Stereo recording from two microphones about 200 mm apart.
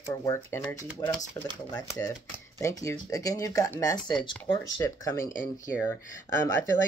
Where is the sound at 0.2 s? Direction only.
15° left (ahead or behind).